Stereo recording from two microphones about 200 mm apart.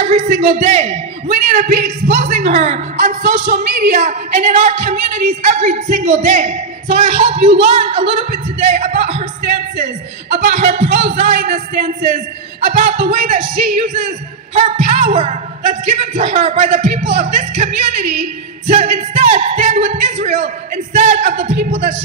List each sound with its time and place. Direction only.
0.0 s a sound: 35° right (ahead or behind)
1.2 s a woman's voice: 40° right (ahead or behind)
3.4 s a sound: 55° right (ahead or behind)
4.0 s a woman's voice: 40° right (ahead or behind)
10.5 s a woman's voice: 30° right (ahead or behind)
11.5 s speech: 50° right (ahead or behind)
12.5 s a woman's voice: 30° right (ahead or behind)